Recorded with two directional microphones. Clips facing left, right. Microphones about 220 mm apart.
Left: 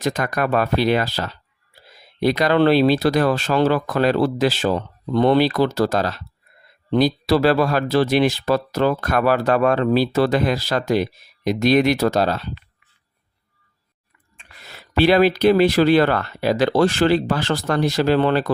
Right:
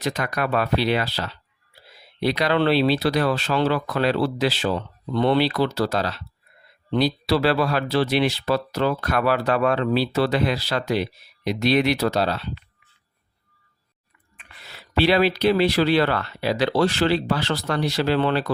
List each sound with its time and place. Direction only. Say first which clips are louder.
0.0 s speech: left 4 dB; 45° left (ahead or behind)
14.6 s speech: left 3 dB; 45° left (ahead or behind)